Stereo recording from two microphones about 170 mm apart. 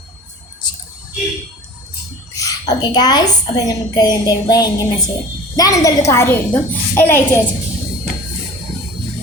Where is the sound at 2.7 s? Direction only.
25° left (ahead or behind).